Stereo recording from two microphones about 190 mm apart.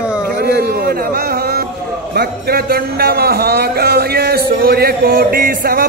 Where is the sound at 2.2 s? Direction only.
55° right (ahead or behind).